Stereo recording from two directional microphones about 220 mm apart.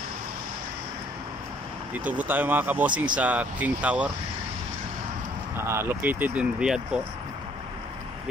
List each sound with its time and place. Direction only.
2.0 s speech: 10° right (ahead or behind)
5.6 s speech: 10° right (ahead or behind)